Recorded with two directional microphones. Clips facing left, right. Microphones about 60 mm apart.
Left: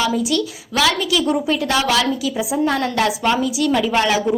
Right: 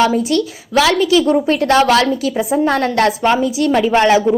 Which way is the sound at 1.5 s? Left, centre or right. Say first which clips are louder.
Right 6 dB; right.